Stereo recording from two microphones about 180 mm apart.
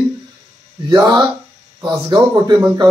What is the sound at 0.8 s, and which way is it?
A man's voice, 20° right (ahead or behind).